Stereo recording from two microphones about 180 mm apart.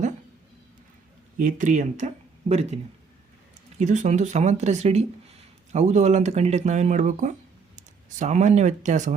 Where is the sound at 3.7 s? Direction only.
40° right (ahead or behind).